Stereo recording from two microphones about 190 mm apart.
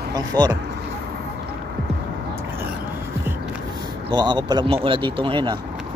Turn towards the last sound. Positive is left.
turn(degrees=-25)  # may be behind; listen again after turning